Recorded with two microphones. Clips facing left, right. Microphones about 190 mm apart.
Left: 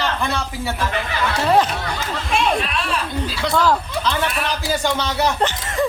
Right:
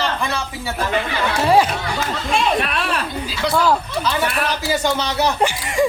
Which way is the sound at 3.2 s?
5° right (ahead or behind).